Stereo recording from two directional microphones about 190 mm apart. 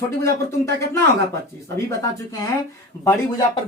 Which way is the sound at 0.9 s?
15° left (ahead or behind).